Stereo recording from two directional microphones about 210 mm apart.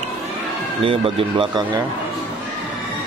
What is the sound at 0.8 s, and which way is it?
Speech, 25° right (ahead or behind).